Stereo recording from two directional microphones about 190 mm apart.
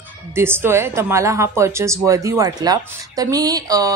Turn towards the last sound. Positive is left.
turn(degrees=-20)  # may be behind; listen again after turning